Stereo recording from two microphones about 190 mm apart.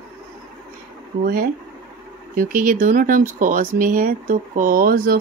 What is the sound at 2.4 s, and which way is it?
Speech, 45° right (ahead or behind).